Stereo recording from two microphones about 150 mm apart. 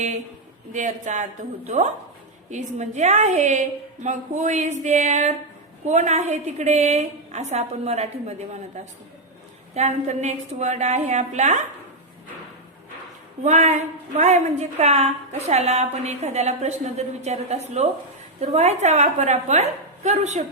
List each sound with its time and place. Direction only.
0.7 s a woman's voice: 55° right (ahead or behind)
13.4 s a woman's voice: 50° right (ahead or behind)